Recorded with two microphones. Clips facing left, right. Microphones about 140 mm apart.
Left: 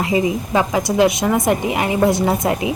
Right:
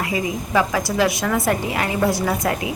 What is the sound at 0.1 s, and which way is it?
A woman's voice, 25° left (ahead or behind).